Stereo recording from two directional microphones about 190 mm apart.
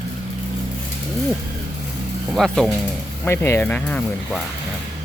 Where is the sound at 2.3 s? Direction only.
Centre (ahead or behind).